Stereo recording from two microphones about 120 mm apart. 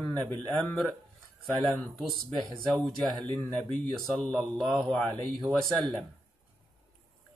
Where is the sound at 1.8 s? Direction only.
Centre (ahead or behind).